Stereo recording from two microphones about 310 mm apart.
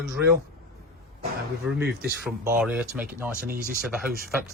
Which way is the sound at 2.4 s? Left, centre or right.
Centre.